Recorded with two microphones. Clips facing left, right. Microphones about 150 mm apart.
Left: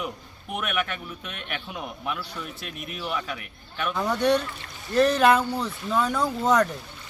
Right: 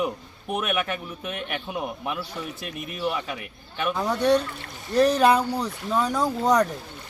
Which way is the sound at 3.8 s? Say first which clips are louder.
Right 1 dB; 10° right (ahead or behind).